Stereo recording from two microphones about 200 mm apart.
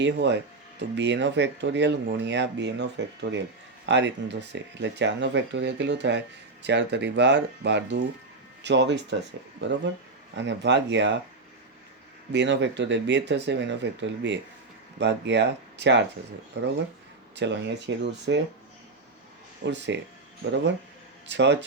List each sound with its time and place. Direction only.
0.0 s speech: 65° right (ahead or behind)
12.3 s speech: 60° right (ahead or behind)
17.3 s speech: 60° right (ahead or behind)
19.6 s speech: 60° right (ahead or behind)
21.2 s speech: 60° right (ahead or behind)